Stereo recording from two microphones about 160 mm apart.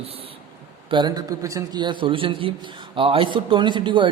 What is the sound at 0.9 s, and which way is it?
A man's voice, 30° right (ahead or behind).